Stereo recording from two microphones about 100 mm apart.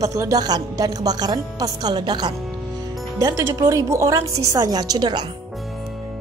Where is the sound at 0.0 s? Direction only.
35° right (ahead or behind).